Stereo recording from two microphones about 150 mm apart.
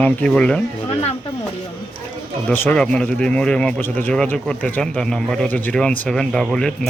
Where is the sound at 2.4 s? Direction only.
10° left (ahead or behind).